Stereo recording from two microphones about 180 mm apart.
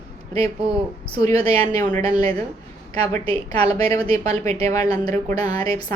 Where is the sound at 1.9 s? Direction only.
35° right (ahead or behind).